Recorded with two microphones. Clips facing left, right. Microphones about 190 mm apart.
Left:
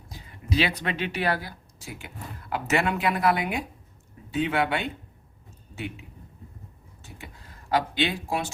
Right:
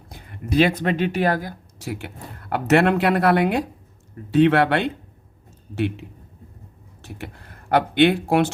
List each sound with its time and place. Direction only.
0.1 s speech: 55° right (ahead or behind)
1.8 s speech: 70° right (ahead or behind)